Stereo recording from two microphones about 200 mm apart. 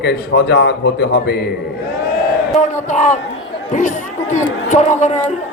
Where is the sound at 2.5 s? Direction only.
35° left (ahead or behind).